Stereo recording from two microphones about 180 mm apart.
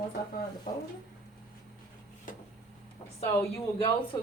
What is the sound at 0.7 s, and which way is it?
Speech, 55° left (ahead or behind).